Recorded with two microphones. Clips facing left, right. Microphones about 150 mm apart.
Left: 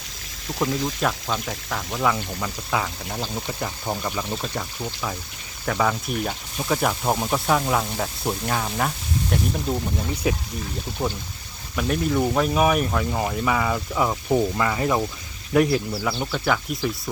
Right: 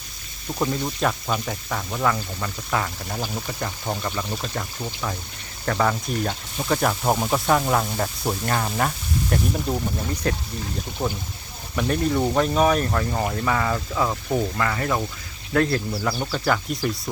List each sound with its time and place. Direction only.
0.6 s speech: centre (ahead or behind)
15.9 s speech: centre (ahead or behind)